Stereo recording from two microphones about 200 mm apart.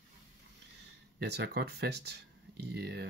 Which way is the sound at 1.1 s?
55° right (ahead or behind).